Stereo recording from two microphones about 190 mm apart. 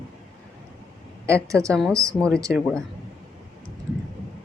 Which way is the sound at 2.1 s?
5° left (ahead or behind).